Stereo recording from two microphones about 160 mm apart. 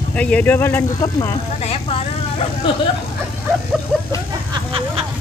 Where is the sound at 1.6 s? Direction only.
35° left (ahead or behind).